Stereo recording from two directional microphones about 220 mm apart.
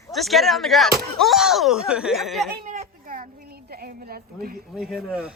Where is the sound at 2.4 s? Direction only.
40° right (ahead or behind).